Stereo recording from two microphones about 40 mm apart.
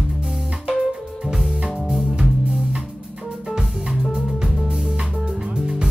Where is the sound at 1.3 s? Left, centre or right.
Centre.